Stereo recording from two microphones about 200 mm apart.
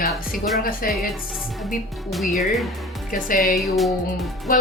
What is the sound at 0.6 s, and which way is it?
Speech, 45° left (ahead or behind).